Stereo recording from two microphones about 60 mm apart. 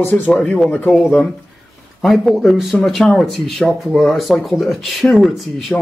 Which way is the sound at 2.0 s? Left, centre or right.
Centre.